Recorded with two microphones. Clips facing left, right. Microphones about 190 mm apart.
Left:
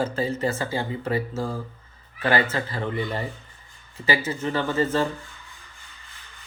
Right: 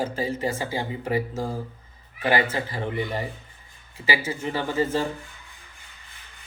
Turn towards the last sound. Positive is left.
turn(degrees=-15)  # may be behind; listen again after turning